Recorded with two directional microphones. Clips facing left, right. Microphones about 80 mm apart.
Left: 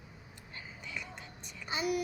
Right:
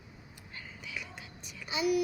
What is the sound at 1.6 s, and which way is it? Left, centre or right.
Speech, left.